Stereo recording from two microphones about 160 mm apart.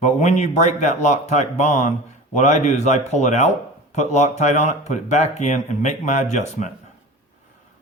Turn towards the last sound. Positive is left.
turn(degrees=45)  # may be behind; listen again after turning